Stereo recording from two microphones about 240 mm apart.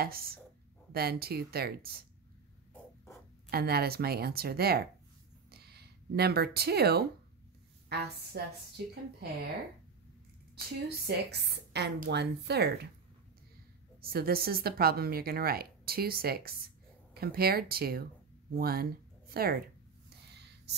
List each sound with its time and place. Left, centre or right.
0.0 s a sound: right
0.9 s speech: right
3.4 s speech: right
5.5 s a sound: right
7.9 s a woman's voice: right
11.1 s a woman's voice: right
14.0 s speech: right